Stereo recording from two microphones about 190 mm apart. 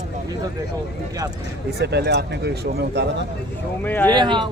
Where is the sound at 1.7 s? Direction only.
60° right (ahead or behind).